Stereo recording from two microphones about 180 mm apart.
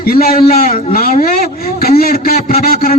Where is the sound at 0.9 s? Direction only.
55° left (ahead or behind).